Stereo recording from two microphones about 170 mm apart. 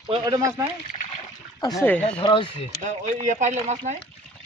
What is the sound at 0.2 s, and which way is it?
Speech, 20° right (ahead or behind).